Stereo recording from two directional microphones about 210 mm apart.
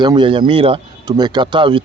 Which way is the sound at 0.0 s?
20° right (ahead or behind).